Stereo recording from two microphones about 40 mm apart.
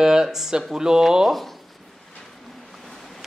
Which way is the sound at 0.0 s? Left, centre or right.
Centre.